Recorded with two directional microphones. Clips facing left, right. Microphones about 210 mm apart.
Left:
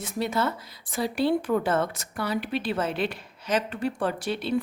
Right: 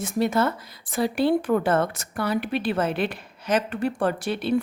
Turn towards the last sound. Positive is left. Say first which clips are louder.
# right 3 dB
turn(degrees=-55)  # may be behind; listen again after turning